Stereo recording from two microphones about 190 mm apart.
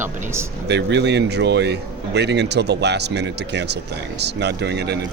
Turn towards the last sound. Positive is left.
turn(degrees=-60)  # may be behind; listen again after turning